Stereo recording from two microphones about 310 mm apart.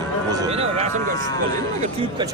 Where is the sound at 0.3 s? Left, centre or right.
Centre.